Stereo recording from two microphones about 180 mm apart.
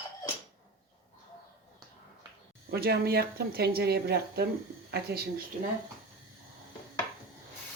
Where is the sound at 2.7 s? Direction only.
60° right (ahead or behind).